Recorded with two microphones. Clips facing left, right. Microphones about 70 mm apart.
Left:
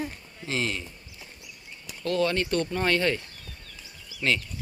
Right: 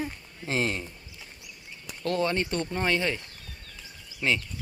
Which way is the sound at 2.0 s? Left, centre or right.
Right.